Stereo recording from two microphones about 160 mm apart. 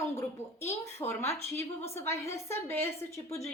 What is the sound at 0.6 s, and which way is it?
A woman's voice, 15° left (ahead or behind).